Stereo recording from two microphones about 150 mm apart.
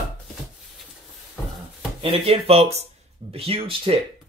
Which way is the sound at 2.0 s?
40° right (ahead or behind).